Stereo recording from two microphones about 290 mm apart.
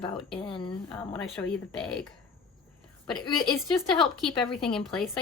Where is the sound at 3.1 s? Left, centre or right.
Centre.